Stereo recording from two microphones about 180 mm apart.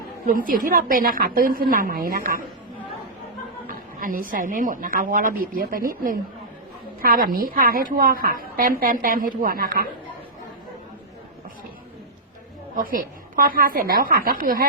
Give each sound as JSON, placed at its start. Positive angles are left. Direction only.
{"t": 0.3, "sound": "a woman's voice", "side_deg": -50}
{"t": 3.7, "sound": "a woman's voice", "side_deg": -50}
{"t": 12.7, "sound": "a woman's voice", "side_deg": -50}